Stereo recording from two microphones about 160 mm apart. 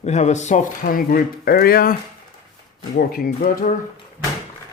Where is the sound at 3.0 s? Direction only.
70° left (ahead or behind).